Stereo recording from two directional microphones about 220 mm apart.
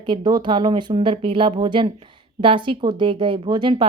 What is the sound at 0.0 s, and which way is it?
Speech, 20° right (ahead or behind).